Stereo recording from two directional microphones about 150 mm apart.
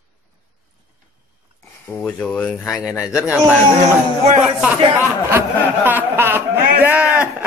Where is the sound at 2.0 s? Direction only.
5° left (ahead or behind).